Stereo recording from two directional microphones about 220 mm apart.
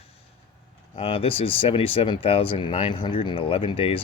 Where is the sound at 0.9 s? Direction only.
25° left (ahead or behind).